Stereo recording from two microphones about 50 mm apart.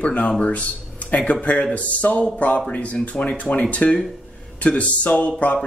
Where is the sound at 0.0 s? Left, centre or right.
Left.